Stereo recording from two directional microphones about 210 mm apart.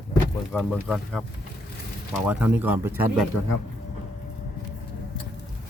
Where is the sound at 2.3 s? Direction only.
10° right (ahead or behind).